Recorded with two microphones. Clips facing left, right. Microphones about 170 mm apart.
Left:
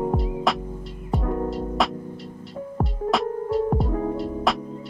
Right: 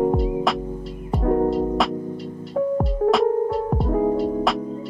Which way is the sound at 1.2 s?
45° right (ahead or behind).